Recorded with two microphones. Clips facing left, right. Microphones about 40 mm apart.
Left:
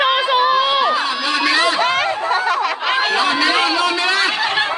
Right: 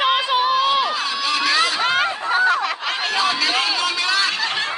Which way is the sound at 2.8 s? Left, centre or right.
Centre.